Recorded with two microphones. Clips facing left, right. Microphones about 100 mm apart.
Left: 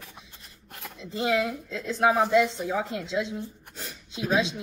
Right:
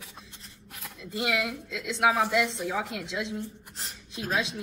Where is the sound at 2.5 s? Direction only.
Centre (ahead or behind).